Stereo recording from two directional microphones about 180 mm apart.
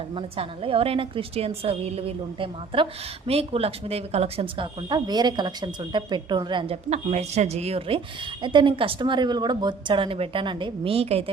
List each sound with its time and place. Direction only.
0.2 s a woman's voice: 30° right (ahead or behind)